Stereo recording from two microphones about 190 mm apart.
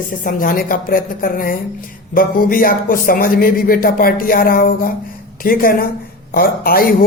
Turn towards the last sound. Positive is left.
turn(degrees=50)  # may be behind; listen again after turning